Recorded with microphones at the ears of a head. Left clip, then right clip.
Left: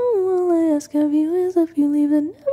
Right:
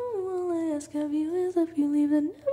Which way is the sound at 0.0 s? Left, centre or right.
Left.